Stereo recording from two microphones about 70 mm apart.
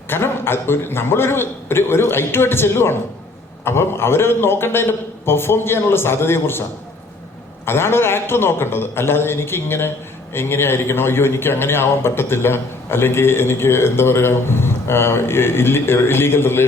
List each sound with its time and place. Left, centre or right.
0.1 s a man's voice: left